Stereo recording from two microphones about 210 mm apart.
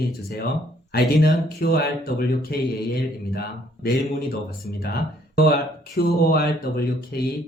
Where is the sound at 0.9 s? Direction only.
45° left (ahead or behind).